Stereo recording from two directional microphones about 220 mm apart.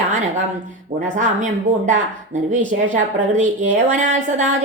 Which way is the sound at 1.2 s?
35° right (ahead or behind).